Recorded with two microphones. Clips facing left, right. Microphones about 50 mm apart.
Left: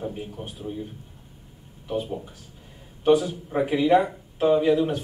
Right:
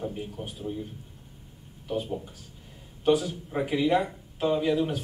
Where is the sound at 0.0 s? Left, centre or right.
Centre.